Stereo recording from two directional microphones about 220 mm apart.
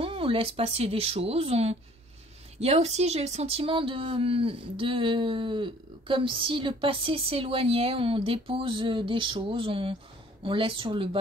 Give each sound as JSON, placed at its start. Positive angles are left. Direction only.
{"t": 0.0, "sound": "speech", "side_deg": -25}